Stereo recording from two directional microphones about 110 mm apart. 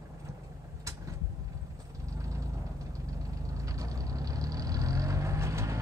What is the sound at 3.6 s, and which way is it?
Vehicle, 30° right (ahead or behind).